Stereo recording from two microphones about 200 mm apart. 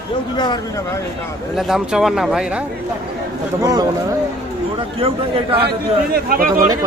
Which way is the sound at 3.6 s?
15° right (ahead or behind).